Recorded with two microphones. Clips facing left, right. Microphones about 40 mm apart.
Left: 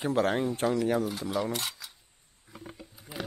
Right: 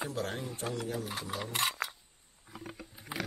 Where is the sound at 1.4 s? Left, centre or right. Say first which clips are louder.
Left 1 dB; right.